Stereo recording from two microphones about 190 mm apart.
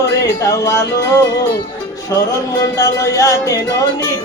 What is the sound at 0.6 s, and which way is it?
Music, 15° left (ahead or behind).